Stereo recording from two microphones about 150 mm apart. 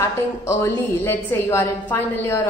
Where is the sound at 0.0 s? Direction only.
20° left (ahead or behind).